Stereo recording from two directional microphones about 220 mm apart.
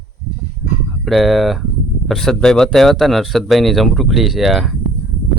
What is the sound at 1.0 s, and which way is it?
Speech, centre (ahead or behind).